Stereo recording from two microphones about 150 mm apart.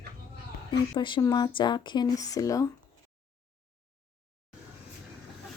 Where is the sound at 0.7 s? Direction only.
35° left (ahead or behind).